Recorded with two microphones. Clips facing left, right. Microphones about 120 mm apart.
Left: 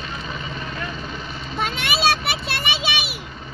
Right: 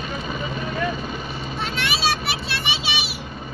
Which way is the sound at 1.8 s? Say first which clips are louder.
Left 2 dB; 55° left (ahead or behind).